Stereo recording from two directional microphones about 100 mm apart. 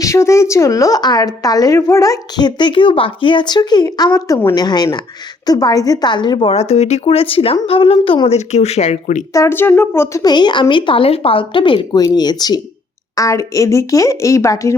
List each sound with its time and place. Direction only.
0.0 s speech: 30° left (ahead or behind); by 6.5 s 50° left (ahead or behind)
6.5 s speech: 90° left
9.3 s speech: 25° left (ahead or behind)
10.2 s speech: 50° left (ahead or behind)
11.9 s speech: 40° left (ahead or behind)